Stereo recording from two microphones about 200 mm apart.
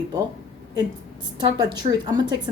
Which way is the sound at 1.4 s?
20° right (ahead or behind).